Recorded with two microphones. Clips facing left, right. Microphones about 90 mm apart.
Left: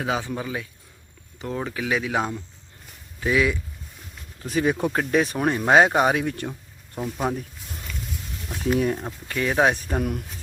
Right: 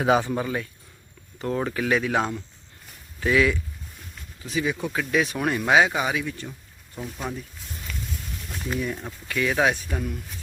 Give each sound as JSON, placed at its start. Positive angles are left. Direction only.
{"t": 0.0, "sound": "speech", "side_deg": -10}
{"t": 4.4, "sound": "speech", "side_deg": 50}
{"t": 5.9, "sound": "speech", "side_deg": 55}
{"t": 7.2, "sound": "speech", "side_deg": 45}
{"t": 7.9, "sound": "a sound", "side_deg": 5}
{"t": 9.0, "sound": "speech", "side_deg": 30}
{"t": 10.0, "sound": "speech", "side_deg": 55}